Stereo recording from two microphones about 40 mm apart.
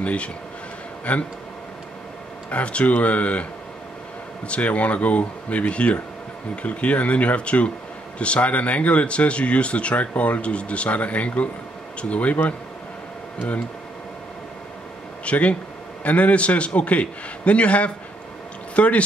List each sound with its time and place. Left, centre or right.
0.0 s speech: left
2.5 s speech: left
4.5 s speech: left
15.2 s speech: left